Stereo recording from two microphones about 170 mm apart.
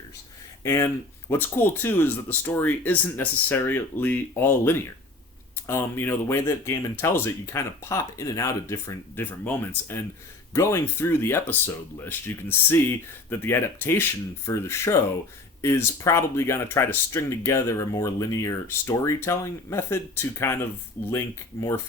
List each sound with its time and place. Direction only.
0.6 s speech: 15° left (ahead or behind)